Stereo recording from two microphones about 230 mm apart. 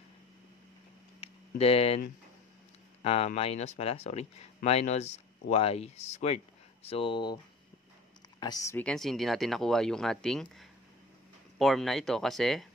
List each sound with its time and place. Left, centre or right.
1.2 s a sound: left
3.0 s speech: left
8.4 s speech: centre